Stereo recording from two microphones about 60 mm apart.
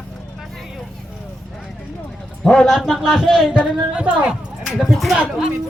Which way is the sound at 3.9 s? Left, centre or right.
Right.